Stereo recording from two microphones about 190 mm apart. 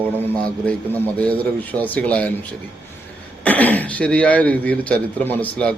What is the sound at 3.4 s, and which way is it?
A man's voice, 10° left (ahead or behind).